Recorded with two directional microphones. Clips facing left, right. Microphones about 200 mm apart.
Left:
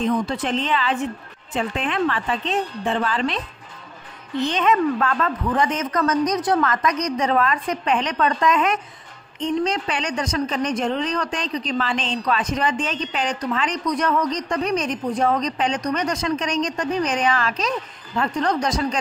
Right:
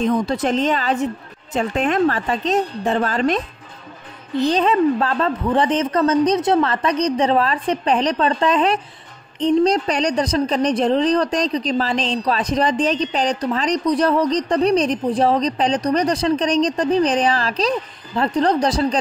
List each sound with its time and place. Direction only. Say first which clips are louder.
0.0 s a woman's voice: right 3 dB; 40° right (ahead or behind)
4.4 s a woman's voice: right 4 dB; 35° right (ahead or behind)